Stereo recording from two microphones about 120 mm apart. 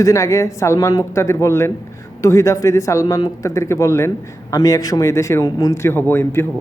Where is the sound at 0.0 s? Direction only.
25° left (ahead or behind).